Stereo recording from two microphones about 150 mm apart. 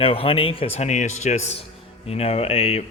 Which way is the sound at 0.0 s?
40° left (ahead or behind).